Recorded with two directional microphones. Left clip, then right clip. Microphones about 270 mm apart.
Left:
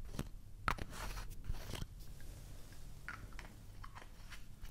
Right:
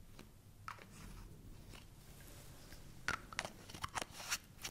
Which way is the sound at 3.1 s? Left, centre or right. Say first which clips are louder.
Right 9 dB; right.